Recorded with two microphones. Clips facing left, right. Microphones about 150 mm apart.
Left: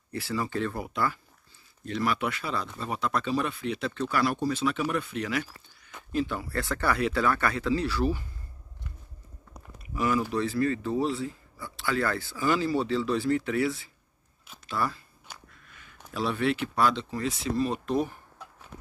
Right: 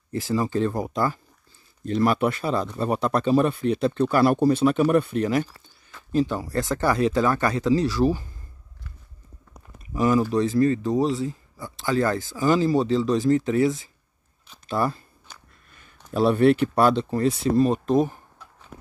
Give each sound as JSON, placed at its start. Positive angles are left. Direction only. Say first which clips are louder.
{"t": 0.2, "sound": "speech", "louder": "right 7 dB", "side_deg": -40}
{"t": 9.9, "sound": "speech", "louder": "right 6 dB", "side_deg": -35}
{"t": 12.4, "sound": "speech", "louder": "right 6 dB", "side_deg": -40}
{"t": 14.8, "sound": "speech", "louder": "right 6 dB", "side_deg": -20}
{"t": 15.3, "sound": "a sound", "louder": "left 1 dB", "side_deg": 10}
{"t": 16.2, "sound": "speech", "louder": "right 10 dB", "side_deg": -45}